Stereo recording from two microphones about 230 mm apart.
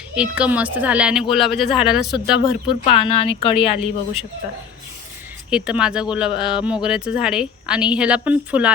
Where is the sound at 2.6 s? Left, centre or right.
Left.